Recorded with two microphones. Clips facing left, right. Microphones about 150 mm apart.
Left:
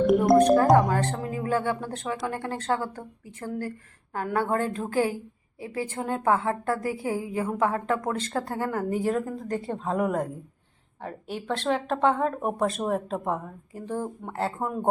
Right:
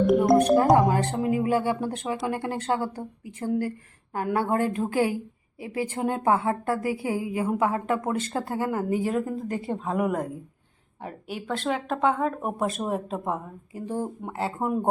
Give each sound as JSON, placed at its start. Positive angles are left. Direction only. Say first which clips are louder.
{"t": 0.3, "sound": "music", "louder": "left 1 dB", "side_deg": -10}
{"t": 0.6, "sound": "a woman's voice", "louder": "even", "side_deg": -20}
{"t": 14.6, "sound": "a woman's voice", "louder": "right 4 dB", "side_deg": -15}